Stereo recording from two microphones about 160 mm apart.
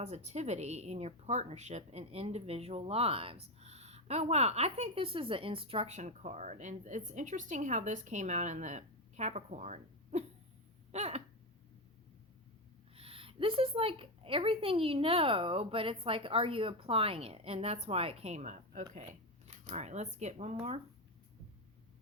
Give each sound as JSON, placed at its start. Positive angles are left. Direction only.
{"t": 0.0, "sound": "a woman's voice", "side_deg": -45}
{"t": 13.0, "sound": "a woman's voice", "side_deg": -35}